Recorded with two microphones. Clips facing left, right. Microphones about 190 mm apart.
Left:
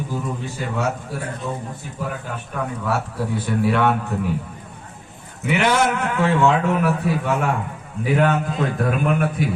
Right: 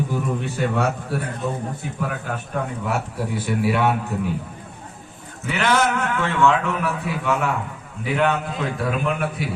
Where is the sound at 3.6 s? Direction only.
10° right (ahead or behind).